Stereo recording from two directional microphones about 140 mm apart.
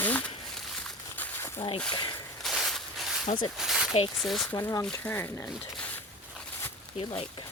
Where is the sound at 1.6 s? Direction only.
40° left (ahead or behind).